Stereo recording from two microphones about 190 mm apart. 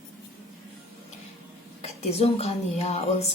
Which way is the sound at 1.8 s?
35° left (ahead or behind).